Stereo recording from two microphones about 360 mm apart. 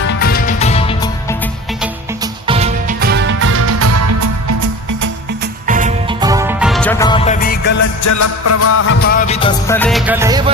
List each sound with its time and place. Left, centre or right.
0.1 s music: left
1.8 s music: centre; by 4.5 s right
5.4 s music: right; by 7.9 s left
8.0 s music: left
9.0 s music: left; by 10.5 s centre